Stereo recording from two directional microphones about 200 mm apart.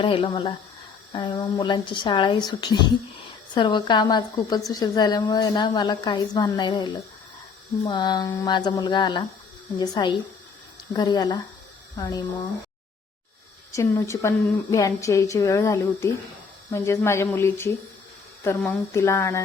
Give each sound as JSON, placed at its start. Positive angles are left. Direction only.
{"t": 0.0, "sound": "a woman's voice", "side_deg": 25}
{"t": 7.9, "sound": "a woman's voice", "side_deg": 20}
{"t": 13.7, "sound": "a woman's voice", "side_deg": 15}